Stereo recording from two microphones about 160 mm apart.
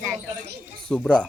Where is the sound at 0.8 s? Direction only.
5° left (ahead or behind).